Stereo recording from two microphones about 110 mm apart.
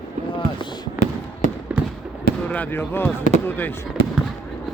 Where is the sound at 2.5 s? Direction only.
15° left (ahead or behind).